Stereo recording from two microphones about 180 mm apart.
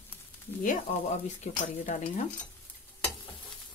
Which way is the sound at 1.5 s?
40° left (ahead or behind).